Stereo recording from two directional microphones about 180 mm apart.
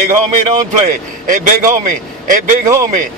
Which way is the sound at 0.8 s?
45° right (ahead or behind).